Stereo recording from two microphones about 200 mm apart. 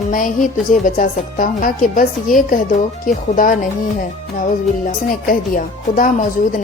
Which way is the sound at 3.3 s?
40° left (ahead or behind).